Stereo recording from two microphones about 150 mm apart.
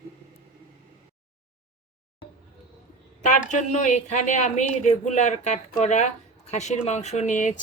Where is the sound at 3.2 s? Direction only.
50° left (ahead or behind).